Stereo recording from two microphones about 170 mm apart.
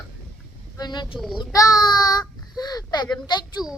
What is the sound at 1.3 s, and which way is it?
Child singing, 20° left (ahead or behind).